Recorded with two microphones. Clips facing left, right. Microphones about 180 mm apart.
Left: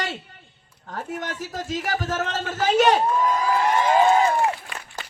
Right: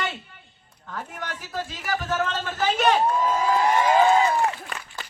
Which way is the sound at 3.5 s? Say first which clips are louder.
Right 2 dB; 10° right (ahead or behind).